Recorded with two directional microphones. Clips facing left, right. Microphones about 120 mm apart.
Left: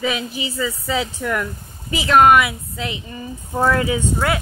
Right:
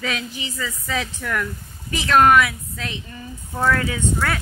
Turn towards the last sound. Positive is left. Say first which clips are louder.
# left 3 dB
turn(degrees=15)  # may be behind; listen again after turning